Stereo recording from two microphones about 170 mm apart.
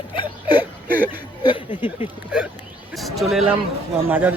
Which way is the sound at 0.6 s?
10° right (ahead or behind).